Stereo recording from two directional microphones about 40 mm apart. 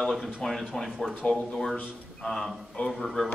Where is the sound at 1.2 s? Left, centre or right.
Left.